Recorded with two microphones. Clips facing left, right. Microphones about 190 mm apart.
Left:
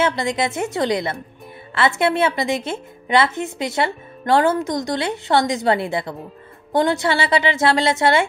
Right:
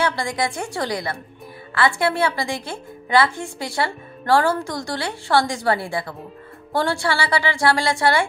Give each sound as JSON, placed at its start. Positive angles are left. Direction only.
{"t": 0.0, "sound": "a woman's voice", "side_deg": 20}